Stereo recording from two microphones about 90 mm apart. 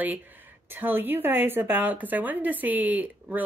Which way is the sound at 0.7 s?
25° right (ahead or behind).